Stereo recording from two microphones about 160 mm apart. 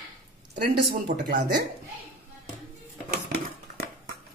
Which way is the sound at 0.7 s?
75° right (ahead or behind).